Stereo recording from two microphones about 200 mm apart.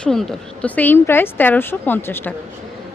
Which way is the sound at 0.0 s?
5° left (ahead or behind).